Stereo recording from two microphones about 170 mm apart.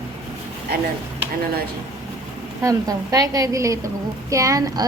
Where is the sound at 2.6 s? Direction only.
20° right (ahead or behind).